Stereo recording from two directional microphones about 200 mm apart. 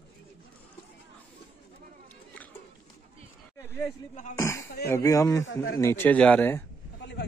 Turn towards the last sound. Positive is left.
turn(degrees=10)  # may be behind; listen again after turning